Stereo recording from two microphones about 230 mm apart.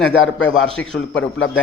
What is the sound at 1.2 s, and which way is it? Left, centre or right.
Speech, left.